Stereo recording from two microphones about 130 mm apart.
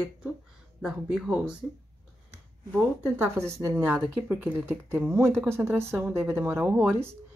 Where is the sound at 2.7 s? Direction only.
15° right (ahead or behind).